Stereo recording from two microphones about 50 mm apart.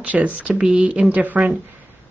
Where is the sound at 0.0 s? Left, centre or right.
Right.